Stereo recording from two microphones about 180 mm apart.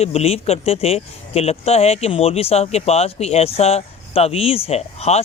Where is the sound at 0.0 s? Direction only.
35° left (ahead or behind).